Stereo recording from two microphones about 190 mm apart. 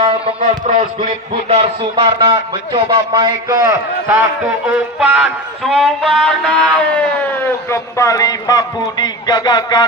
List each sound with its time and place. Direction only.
0.0 s a man's voice: 30° right (ahead or behind)
4.9 s speech: 5° right (ahead or behind); by 9.8 s 20° left (ahead or behind)